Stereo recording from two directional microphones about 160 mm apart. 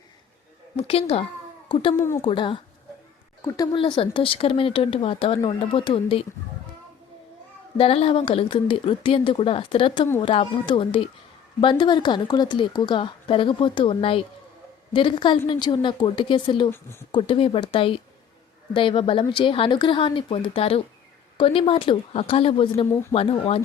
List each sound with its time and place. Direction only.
0.8 s a woman's voice: 40° left (ahead or behind)
3.7 s a woman's voice: 30° left (ahead or behind)
7.8 s a woman's voice: 35° left (ahead or behind)
16.6 s a woman's voice: 15° left (ahead or behind)
17.1 s a woman's voice: 35° left (ahead or behind)